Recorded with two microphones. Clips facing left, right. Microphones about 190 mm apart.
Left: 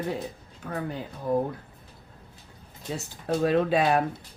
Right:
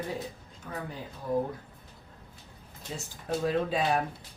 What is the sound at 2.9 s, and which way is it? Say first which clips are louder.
Speech: left 5 dB; 70° left (ahead or behind).